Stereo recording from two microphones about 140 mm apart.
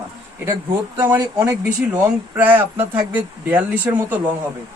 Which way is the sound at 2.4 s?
15° right (ahead or behind).